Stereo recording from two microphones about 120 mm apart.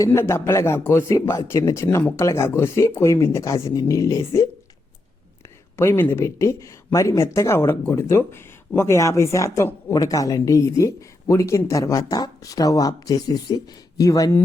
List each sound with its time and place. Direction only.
0.0 s speech: 25° left (ahead or behind)
5.7 s speech: 20° left (ahead or behind)